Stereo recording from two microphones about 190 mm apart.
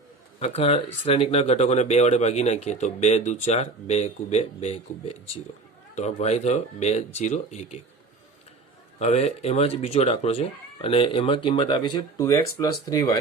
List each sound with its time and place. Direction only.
0.3 s speech: 35° left (ahead or behind)
9.0 s speech: 35° left (ahead or behind); by 13.1 s 20° left (ahead or behind)